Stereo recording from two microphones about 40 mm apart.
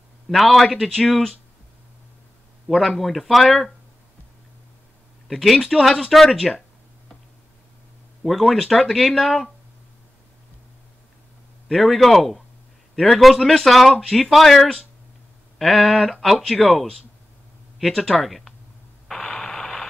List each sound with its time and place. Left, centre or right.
0.3 s speech: centre
2.7 s speech: right
3.0 s speech: centre
5.3 s speech: centre
8.2 s speech: centre
11.7 s speech: centre
19.2 s a sound: centre